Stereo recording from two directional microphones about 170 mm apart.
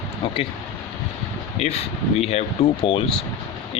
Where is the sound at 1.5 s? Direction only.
40° left (ahead or behind).